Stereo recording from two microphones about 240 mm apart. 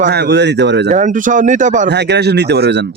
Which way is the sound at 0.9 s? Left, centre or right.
Right.